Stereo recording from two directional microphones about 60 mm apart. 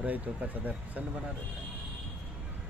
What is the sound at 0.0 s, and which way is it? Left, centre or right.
Speech, right.